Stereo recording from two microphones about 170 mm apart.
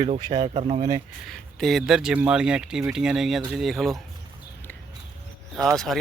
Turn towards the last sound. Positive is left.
turn(degrees=0)  # may be behind; listen again after turning